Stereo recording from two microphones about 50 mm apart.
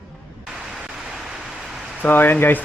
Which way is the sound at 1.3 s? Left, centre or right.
Centre.